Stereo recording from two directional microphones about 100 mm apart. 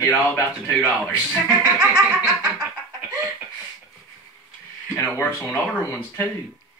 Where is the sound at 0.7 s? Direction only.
10° left (ahead or behind).